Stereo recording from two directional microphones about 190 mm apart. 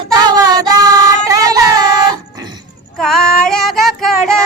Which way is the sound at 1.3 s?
20° right (ahead or behind).